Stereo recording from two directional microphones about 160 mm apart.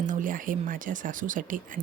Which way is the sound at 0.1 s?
55° right (ahead or behind).